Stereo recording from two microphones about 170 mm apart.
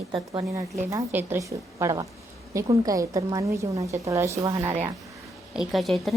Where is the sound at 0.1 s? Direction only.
25° right (ahead or behind).